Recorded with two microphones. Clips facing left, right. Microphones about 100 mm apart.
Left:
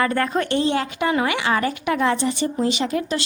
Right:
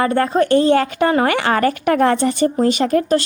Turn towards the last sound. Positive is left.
turn(degrees=-45)  # may be behind; listen again after turning